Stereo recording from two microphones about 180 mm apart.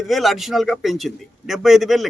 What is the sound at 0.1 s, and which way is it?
A man's voice, centre (ahead or behind).